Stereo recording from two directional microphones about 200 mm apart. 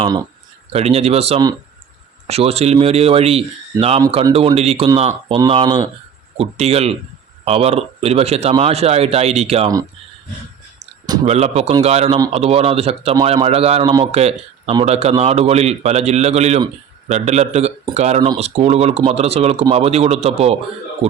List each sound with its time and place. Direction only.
0.0 s speech: 20° right (ahead or behind)
0.7 s speech: 30° right (ahead or behind)
6.3 s speech: 30° right (ahead or behind)
10.8 s a sound: 20° right (ahead or behind)
11.3 s speech: 30° right (ahead or behind)